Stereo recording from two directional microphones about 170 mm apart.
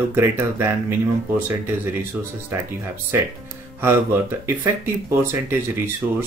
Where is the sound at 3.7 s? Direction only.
15° right (ahead or behind).